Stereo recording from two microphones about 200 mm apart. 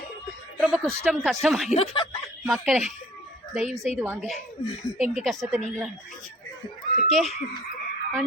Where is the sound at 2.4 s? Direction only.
Centre (ahead or behind).